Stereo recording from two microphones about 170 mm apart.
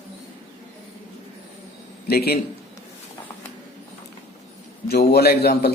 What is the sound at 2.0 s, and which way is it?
Speech, 65° left (ahead or behind).